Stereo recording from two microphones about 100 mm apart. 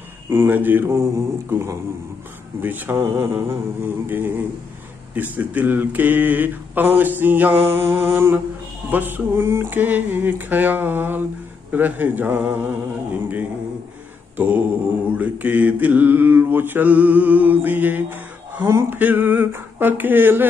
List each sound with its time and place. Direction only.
0.3 s mantra: 20° right (ahead or behind)
5.1 s speech: 15° right (ahead or behind)
7.0 s mantra: 20° right (ahead or behind)
14.3 s mantra: 15° right (ahead or behind)